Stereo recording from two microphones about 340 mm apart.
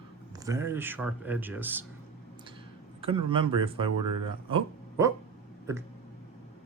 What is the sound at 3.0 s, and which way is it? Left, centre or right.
Speech, centre.